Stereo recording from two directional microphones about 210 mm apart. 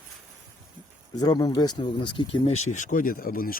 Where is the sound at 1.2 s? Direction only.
20° left (ahead or behind); by 3.5 s 45° left (ahead or behind).